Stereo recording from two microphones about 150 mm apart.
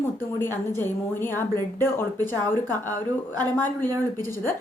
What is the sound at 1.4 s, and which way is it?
Speech, 15° left (ahead or behind).